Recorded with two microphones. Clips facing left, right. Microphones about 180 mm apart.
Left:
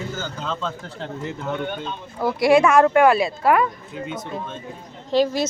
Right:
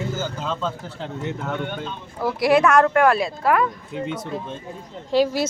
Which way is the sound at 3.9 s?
30° right (ahead or behind).